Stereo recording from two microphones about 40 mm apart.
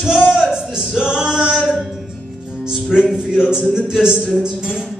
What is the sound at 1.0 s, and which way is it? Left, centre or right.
Singing, centre.